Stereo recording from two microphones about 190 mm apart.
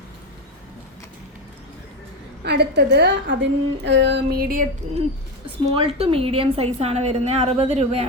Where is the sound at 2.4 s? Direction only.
60° right (ahead or behind).